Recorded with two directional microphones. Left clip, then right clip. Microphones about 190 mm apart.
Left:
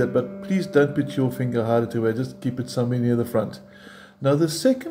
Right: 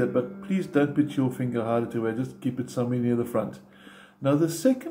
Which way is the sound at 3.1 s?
25° left (ahead or behind).